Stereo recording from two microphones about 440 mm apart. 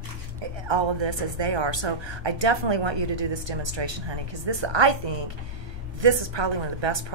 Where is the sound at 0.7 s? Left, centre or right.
Right.